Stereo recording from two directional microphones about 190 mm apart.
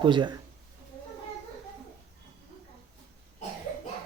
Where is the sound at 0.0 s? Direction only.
25° right (ahead or behind).